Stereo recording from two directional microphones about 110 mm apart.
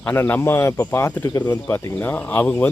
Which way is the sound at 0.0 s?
20° left (ahead or behind).